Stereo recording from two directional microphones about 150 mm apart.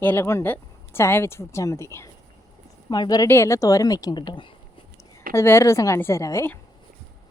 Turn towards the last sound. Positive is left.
turn(degrees=20)  # may be behind; listen again after turning